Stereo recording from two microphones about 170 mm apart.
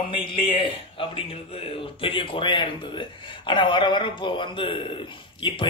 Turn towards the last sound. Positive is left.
turn(degrees=30)  # may be behind; listen again after turning